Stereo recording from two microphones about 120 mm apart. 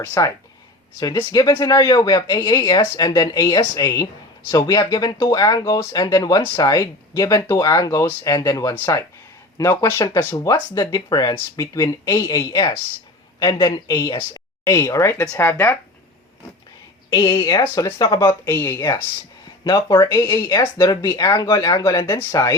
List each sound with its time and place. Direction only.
0.0 s speech: 25° left (ahead or behind)
15.2 s speech: 15° left (ahead or behind)
17.1 s speech: 25° left (ahead or behind)
18.0 s speech: 35° left (ahead or behind)
18.4 s speech: 20° left (ahead or behind)
19.6 s speech: 40° left (ahead or behind)
20.0 s speech: 25° left (ahead or behind)